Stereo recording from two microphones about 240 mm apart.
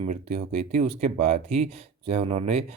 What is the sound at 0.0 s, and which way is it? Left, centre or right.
Speech, right.